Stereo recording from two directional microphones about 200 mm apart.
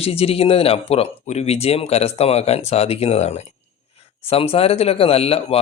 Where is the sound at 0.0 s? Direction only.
30° left (ahead or behind).